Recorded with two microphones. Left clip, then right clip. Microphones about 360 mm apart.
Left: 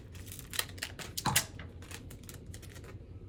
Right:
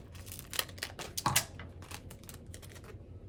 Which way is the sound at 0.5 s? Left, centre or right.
Centre.